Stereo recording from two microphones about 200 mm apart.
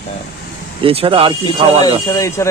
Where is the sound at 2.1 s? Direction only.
15° left (ahead or behind).